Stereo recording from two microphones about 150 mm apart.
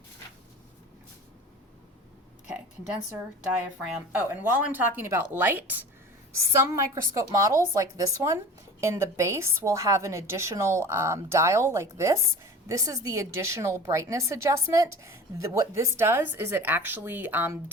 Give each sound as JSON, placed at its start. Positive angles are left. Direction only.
{"t": 3.8, "sound": "a woman's voice", "side_deg": -10}